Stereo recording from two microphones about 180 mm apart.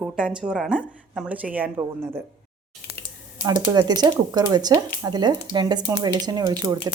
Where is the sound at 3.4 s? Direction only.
20° right (ahead or behind).